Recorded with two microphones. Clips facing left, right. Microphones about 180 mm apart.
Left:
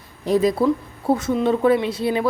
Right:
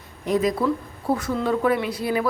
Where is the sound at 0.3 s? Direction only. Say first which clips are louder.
Left 4 dB; 30° left (ahead or behind).